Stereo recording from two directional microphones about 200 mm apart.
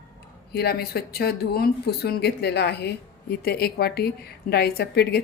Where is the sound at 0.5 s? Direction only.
50° left (ahead or behind).